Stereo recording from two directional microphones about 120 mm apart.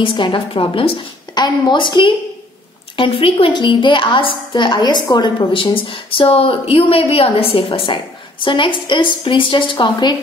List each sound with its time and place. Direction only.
0.0 s a woman's voice: 45° left (ahead or behind)